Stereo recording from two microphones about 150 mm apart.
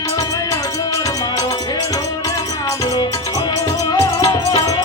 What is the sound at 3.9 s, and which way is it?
Music, 20° left (ahead or behind).